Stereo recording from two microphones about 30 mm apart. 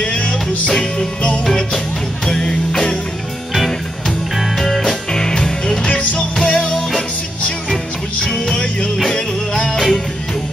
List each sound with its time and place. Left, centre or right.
2.2 s music: left
4.6 s music: centre
5.1 s music: left
5.9 s music: left
6.4 s music: left
9.1 s music: left